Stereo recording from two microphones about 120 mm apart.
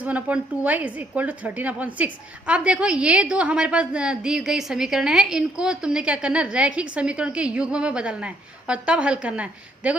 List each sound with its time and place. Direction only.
0.0 s a woman's voice: 10° right (ahead or behind)